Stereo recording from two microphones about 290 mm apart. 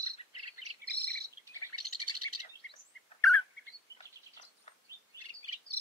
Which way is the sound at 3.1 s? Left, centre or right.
Left.